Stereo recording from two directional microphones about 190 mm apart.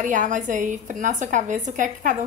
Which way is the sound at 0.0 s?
45° right (ahead or behind).